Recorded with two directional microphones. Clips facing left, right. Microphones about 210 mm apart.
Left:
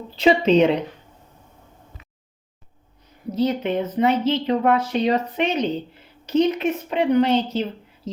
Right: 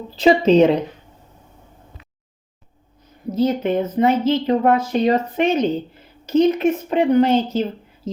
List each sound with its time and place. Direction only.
0.2 s speech: 40° right (ahead or behind)
3.3 s speech: 45° right (ahead or behind)